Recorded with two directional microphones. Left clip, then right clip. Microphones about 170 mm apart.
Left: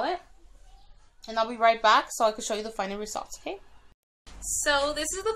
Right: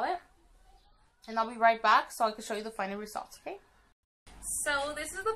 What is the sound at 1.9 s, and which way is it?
Speech, 55° left (ahead or behind).